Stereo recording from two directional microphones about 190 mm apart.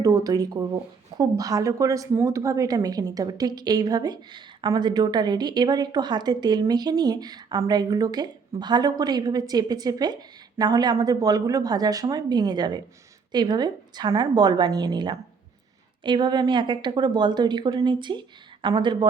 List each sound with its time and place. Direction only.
0.0 s a woman's voice: 20° right (ahead or behind)